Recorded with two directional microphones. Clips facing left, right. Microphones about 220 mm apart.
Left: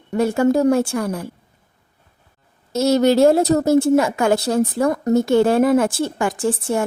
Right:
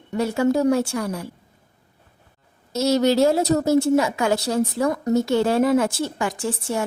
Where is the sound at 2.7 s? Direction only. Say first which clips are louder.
Left 3 dB; 55° left (ahead or behind).